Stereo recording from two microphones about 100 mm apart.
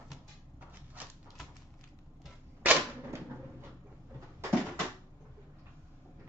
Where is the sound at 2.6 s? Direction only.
15° right (ahead or behind).